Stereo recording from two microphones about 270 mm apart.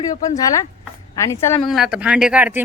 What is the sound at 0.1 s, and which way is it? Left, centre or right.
Speech, centre.